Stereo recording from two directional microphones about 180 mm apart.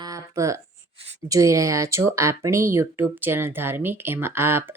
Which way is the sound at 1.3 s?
20° right (ahead or behind).